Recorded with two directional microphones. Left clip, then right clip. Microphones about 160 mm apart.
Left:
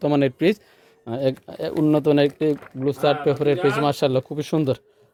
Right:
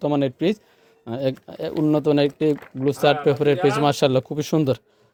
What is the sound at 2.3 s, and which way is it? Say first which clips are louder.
Speech: right 1 dB; 10° right (ahead or behind).